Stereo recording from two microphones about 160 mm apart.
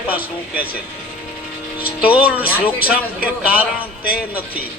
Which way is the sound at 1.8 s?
10° right (ahead or behind).